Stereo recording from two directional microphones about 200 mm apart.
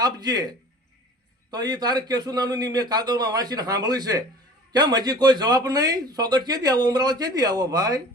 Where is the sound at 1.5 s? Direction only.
20° right (ahead or behind).